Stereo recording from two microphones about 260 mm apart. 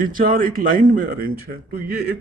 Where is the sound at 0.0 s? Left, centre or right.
Right.